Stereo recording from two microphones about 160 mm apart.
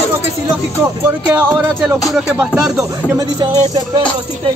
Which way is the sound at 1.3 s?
10° right (ahead or behind).